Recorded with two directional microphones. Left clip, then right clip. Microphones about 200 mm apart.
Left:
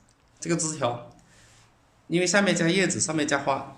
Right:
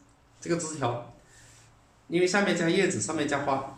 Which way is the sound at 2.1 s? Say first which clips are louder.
Left 2 dB; 60° left (ahead or behind).